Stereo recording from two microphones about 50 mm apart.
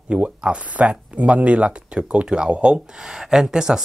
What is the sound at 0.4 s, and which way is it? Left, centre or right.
Speech, right.